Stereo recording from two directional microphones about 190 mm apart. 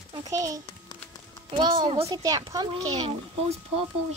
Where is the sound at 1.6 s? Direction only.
25° right (ahead or behind).